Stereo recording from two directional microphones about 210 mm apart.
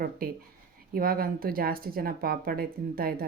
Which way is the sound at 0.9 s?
45° right (ahead or behind).